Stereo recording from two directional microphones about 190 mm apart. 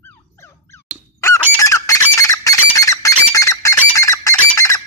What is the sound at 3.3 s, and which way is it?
Bird, 15° left (ahead or behind).